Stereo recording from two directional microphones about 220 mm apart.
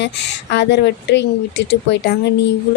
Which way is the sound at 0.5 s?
50° left (ahead or behind).